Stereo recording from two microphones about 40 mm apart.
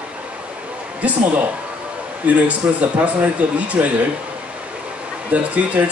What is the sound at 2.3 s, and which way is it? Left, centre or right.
A man's voice, right.